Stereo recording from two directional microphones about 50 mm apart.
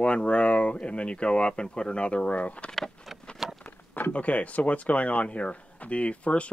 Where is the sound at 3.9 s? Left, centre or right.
Left.